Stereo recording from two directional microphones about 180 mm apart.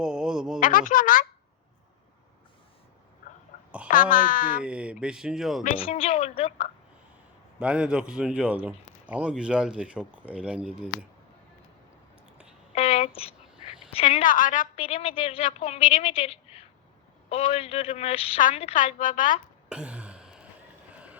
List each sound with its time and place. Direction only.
0.0 s a sound: 5° right (ahead or behind)
0.6 s speech: 50° left (ahead or behind)
3.8 s a woman's voice: 50° left (ahead or behind)
4.6 s a man's voice: 5° right (ahead or behind)
5.7 s a woman's voice: 30° left (ahead or behind)
7.6 s a man's voice: 5° right (ahead or behind)
12.7 s a sound: 35° left (ahead or behind)
13.9 s a woman's voice: 35° left (ahead or behind)
14.8 s a woman's voice: 35° left (ahead or behind)
18.8 s a woman's voice: 45° left (ahead or behind)
19.6 s a sound: 5° right (ahead or behind)
20.9 s vehicle: 5° right (ahead or behind)